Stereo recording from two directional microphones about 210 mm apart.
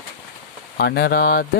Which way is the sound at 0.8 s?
50° left (ahead or behind).